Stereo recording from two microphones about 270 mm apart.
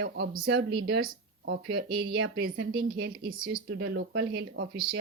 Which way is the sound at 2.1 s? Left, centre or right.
Right.